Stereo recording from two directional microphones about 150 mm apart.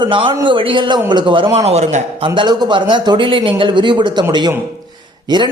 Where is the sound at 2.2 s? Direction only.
35° right (ahead or behind).